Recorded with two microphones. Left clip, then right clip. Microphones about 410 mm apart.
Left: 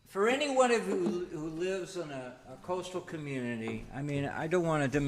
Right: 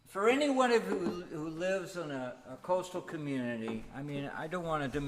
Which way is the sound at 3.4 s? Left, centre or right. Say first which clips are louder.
Even; left.